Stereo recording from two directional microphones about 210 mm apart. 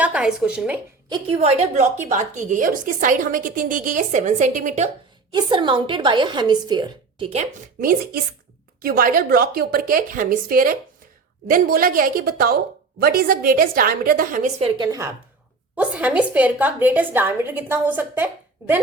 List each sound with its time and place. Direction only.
0.0 s a woman's voice: 5° right (ahead or behind)
1.1 s a woman's voice: 25° right (ahead or behind)
5.3 s a woman's voice: 20° right (ahead or behind); by 14.7 s 35° right (ahead or behind)
14.8 s a woman's voice: 15° right (ahead or behind)